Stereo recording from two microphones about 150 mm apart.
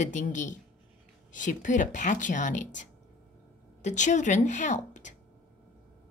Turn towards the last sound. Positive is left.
turn(degrees=55)  # may be behind; listen again after turning